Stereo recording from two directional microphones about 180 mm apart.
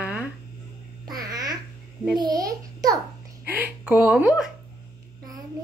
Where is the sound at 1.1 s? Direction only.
20° right (ahead or behind).